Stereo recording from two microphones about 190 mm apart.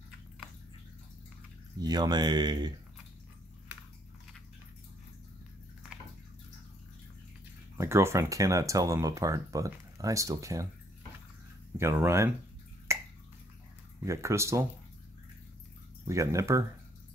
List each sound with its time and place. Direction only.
1.8 s speech: 20° right (ahead or behind)
7.7 s speech: 15° right (ahead or behind)
11.8 s speech: 15° right (ahead or behind)
12.9 s finger snapping: 15° right (ahead or behind)
14.0 s speech: 15° right (ahead or behind)
16.1 s speech: 15° right (ahead or behind)